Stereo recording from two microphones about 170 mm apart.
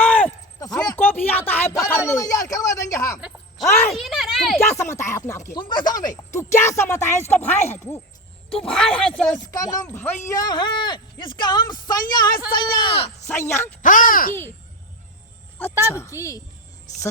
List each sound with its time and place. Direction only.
0.0 s a sound: 10° left (ahead or behind)
0.9 s speech: 10° left (ahead or behind)
3.2 s speech: centre (ahead or behind)
4.7 s speech: 15° left (ahead or behind)
9.5 s speech: 20° left (ahead or behind)
10.3 s speech: 25° left (ahead or behind)
13.2 s speech: 15° left (ahead or behind)
13.8 s speech: 55° left (ahead or behind)
15.8 s speech: 15° left (ahead or behind)